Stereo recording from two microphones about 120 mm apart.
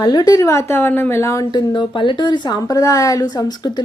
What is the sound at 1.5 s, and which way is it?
A woman's voice, 40° left (ahead or behind).